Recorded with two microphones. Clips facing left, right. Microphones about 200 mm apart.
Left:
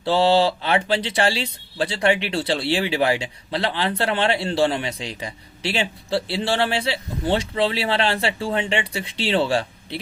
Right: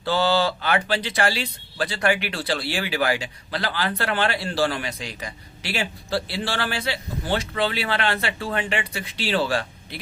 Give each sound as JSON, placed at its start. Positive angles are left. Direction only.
{"t": 0.0, "sound": "speech", "side_deg": 25}